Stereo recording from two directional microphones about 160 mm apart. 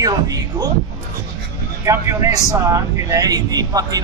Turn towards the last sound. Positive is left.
turn(degrees=-25)  # may be behind; listen again after turning